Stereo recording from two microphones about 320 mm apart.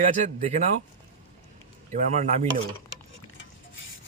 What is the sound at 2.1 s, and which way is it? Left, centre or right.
Speech, right.